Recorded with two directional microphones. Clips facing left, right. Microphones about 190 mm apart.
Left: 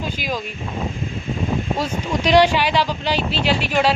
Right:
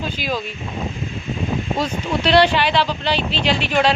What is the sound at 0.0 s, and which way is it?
Speech, 10° left (ahead or behind).